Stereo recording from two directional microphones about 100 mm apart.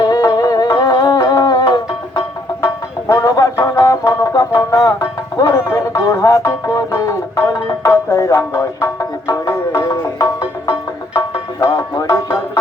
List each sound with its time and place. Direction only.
0.0 s music: 35° left (ahead or behind)